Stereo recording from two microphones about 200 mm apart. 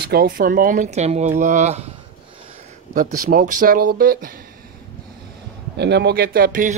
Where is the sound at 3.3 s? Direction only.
40° right (ahead or behind).